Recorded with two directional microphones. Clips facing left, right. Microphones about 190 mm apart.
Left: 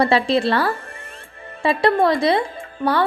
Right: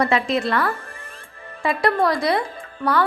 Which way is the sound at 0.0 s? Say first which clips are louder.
Left 3 dB; 30° left (ahead or behind).